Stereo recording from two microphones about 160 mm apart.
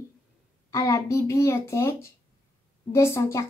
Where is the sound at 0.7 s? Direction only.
20° left (ahead or behind).